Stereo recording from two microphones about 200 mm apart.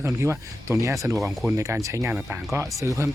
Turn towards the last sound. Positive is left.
turn(degrees=-15)  # may be behind; listen again after turning